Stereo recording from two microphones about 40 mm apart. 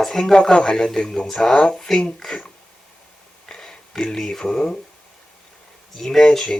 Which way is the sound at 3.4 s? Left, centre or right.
Centre.